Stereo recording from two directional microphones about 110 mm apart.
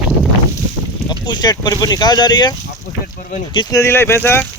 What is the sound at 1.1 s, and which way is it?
Speech, 40° left (ahead or behind).